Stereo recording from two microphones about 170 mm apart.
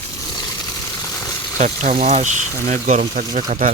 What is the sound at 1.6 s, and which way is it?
Speech, 45° right (ahead or behind).